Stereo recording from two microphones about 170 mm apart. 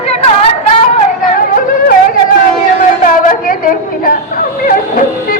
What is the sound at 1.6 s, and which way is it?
Yodeling, 55° left (ahead or behind).